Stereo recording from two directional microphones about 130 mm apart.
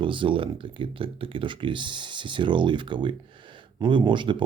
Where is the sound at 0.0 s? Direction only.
40° right (ahead or behind).